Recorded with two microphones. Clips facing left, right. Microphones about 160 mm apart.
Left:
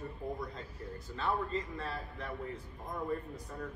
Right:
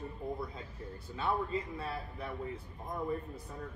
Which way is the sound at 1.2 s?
10° right (ahead or behind).